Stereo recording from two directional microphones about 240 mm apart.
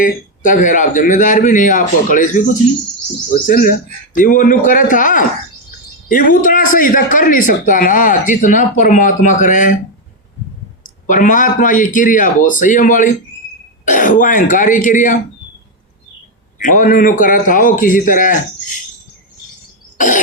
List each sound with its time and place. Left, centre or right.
0.0 s a man's voice: left
3.4 s a man's voice: left
11.0 s a man's voice: left
16.6 s a man's voice: left
20.0 s cough: left